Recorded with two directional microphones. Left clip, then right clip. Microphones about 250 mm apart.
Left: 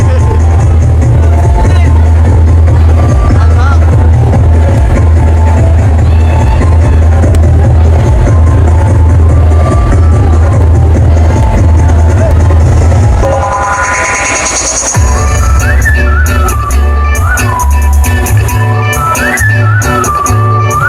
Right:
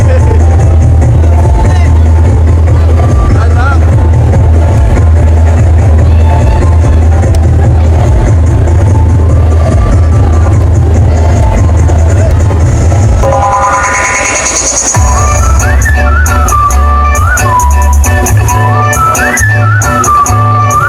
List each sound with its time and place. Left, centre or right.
13.2 s music: right
18.9 s music: centre